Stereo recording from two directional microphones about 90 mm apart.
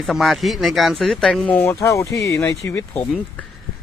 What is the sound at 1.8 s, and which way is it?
Speech, 35° left (ahead or behind).